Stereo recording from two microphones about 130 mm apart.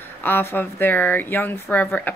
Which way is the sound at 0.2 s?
15° left (ahead or behind).